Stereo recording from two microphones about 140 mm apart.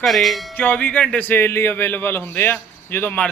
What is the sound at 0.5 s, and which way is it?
Speech, 10° left (ahead or behind).